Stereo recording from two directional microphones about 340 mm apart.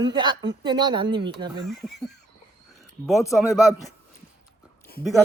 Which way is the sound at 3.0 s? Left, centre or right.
Centre.